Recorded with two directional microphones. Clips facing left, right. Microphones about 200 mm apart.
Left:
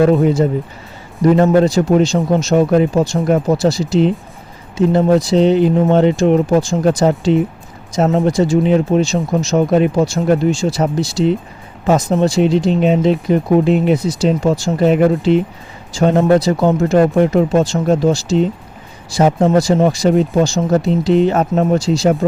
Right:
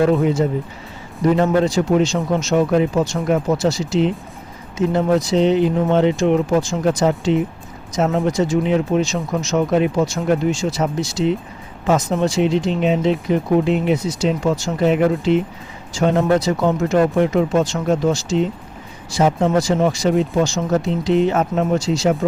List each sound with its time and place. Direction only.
1.4 s speech: 40° left (ahead or behind)